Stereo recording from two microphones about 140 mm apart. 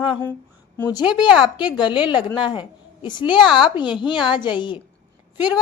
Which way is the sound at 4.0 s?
35° left (ahead or behind).